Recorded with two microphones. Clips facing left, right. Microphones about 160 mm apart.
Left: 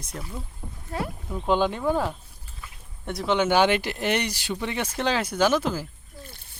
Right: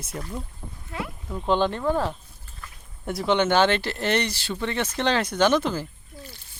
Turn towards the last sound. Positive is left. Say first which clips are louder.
# right 1 dB
turn(degrees=5)  # may be behind; listen again after turning